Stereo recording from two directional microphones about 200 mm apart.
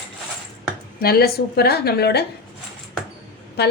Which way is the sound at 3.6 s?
55° left (ahead or behind).